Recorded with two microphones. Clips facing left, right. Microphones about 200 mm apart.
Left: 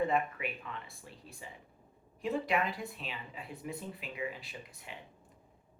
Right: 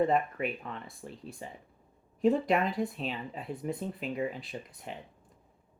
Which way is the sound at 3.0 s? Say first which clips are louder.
Right 8 dB; 45° right (ahead or behind).